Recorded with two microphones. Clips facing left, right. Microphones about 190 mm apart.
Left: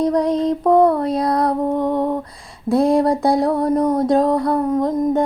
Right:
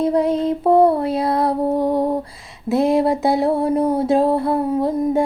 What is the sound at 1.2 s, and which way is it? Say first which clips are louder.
Music: even; 25° right (ahead or behind).